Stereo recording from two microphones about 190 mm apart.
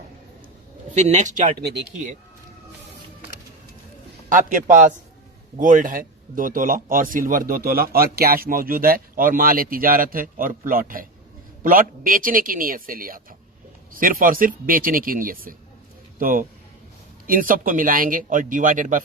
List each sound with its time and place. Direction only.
0.9 s speech: 40° right (ahead or behind); by 1.9 s 60° right (ahead or behind)
4.3 s a man's voice: 45° right (ahead or behind)